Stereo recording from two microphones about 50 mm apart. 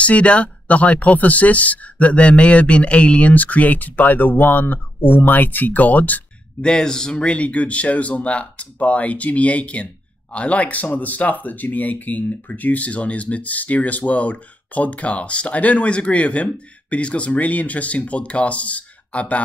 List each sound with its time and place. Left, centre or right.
0.0 s speech: left
6.6 s speech: centre